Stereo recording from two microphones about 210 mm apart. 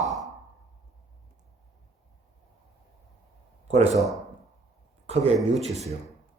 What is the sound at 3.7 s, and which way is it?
Speech, 30° right (ahead or behind).